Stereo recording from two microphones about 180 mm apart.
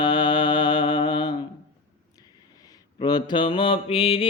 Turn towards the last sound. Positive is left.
turn(degrees=30)  # may be behind; listen again after turning